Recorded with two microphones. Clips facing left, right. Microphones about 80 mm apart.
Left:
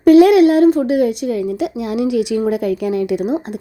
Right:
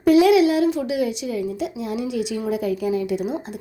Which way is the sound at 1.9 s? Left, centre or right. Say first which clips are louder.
Left 10 dB; left.